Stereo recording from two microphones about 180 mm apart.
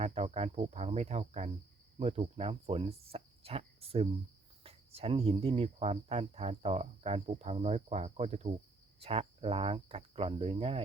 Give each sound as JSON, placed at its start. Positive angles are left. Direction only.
{"t": 0.0, "sound": "speech", "side_deg": -35}